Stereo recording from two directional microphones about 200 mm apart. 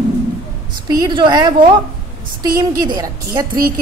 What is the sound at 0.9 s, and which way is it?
A woman's voice, 20° right (ahead or behind).